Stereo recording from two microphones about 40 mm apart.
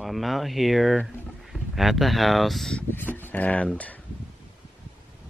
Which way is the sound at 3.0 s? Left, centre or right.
Left.